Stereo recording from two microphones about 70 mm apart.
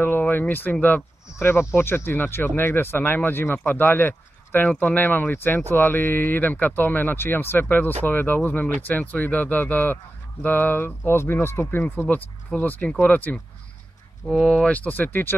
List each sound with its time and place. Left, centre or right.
0.0 s speech: left
14.4 s speech: centre
14.7 s speech: left